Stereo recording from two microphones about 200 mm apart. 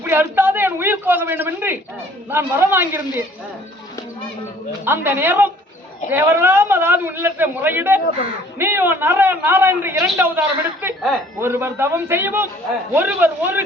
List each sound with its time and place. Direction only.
0.0 s a sound: 10° right (ahead or behind)
2.3 s a man's voice: 10° right (ahead or behind)
4.9 s a man's voice: 10° right (ahead or behind)